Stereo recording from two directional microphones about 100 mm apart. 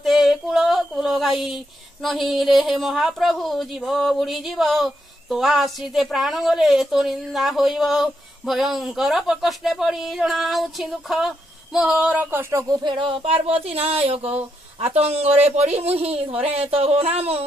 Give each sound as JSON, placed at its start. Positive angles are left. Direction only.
{"t": 0.0, "sound": "female singing", "side_deg": 0}
{"t": 12.2, "sound": "speech", "side_deg": -20}
{"t": 12.7, "sound": "speech", "side_deg": -50}